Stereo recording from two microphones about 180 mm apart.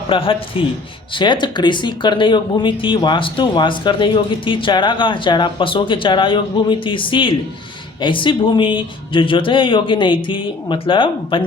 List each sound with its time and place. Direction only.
0.1 s speech: 30° left (ahead or behind)